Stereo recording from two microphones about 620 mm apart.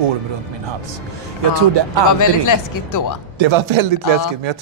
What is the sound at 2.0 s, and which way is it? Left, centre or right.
Speech, left.